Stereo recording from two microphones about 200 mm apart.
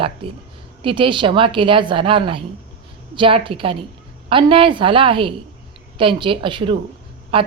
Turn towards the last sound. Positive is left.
turn(degrees=-25)  # may be behind; listen again after turning